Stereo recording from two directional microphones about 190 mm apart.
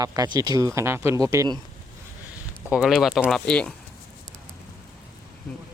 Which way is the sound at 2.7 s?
Centre (ahead or behind).